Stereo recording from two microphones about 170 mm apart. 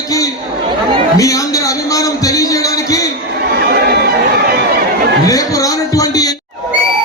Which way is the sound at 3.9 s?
70° right (ahead or behind).